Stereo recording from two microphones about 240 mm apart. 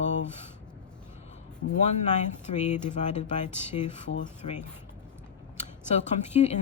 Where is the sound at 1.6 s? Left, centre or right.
Left.